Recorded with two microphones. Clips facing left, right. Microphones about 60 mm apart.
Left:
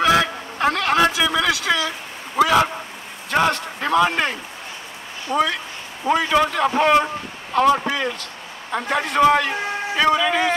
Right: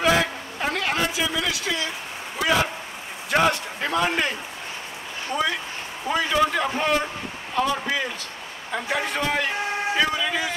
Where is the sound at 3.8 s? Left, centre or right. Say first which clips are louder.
Left 5 dB; left.